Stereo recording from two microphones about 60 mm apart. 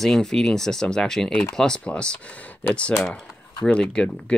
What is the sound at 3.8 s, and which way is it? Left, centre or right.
Speech, centre.